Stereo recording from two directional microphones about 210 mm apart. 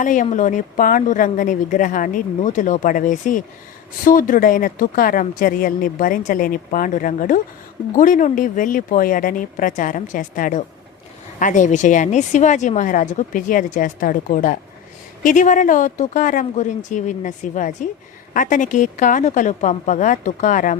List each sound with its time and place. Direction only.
0.0 s a woman's voice: 40° left (ahead or behind)